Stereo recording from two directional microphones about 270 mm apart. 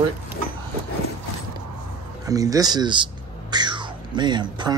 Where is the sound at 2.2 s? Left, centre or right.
Centre.